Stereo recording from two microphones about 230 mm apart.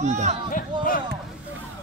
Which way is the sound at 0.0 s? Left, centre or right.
Right.